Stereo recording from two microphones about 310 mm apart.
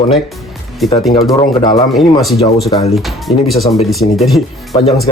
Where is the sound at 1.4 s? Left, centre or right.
Centre.